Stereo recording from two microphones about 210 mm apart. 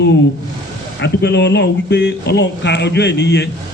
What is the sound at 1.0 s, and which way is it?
A man's voice, 55° left (ahead or behind).